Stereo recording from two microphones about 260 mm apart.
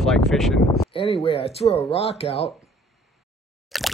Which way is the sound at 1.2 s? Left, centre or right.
Left.